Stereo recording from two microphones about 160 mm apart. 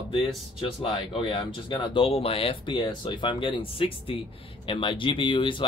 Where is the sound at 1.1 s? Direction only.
30° left (ahead or behind).